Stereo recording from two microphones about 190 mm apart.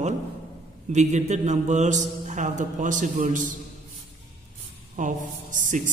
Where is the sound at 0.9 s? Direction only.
40° right (ahead or behind).